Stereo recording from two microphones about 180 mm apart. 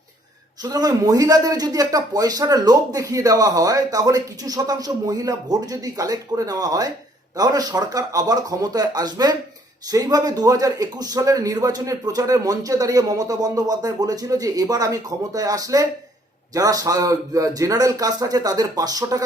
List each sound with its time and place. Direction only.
0.6 s speech: 20° right (ahead or behind)